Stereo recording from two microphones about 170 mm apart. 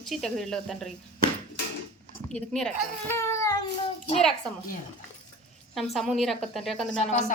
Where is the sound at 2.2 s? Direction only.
5° left (ahead or behind).